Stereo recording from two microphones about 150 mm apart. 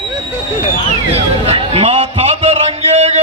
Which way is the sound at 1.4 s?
40° right (ahead or behind).